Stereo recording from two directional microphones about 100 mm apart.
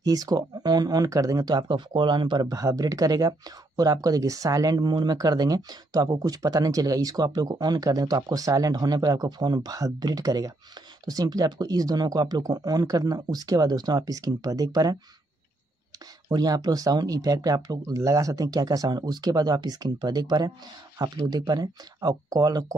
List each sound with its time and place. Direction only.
0.0 s speech: 40° right (ahead or behind)
16.3 s speech: 40° right (ahead or behind)